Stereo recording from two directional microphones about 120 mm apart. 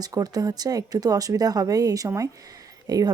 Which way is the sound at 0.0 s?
30° right (ahead or behind).